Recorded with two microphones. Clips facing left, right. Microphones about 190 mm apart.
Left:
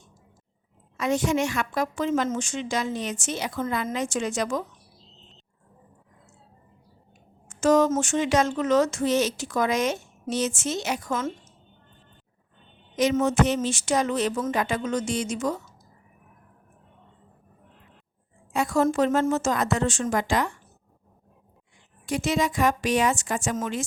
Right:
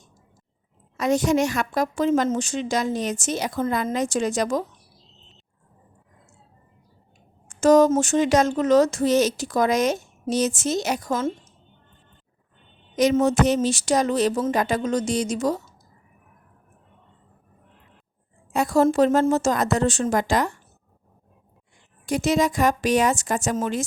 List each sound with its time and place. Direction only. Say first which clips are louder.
0.9 s speech: right 4 dB; 40° right (ahead or behind)
7.4 s speech: right 4 dB; 40° right (ahead or behind)
13.0 s speech: right 3 dB; 40° right (ahead or behind)
18.5 s speech: right 4 dB; 35° right (ahead or behind)
22.0 s speech: right 4 dB; 40° right (ahead or behind)